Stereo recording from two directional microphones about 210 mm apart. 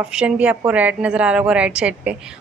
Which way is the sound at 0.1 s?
5° right (ahead or behind).